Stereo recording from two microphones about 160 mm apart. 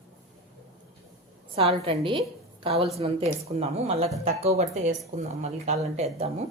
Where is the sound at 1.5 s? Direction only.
35° right (ahead or behind).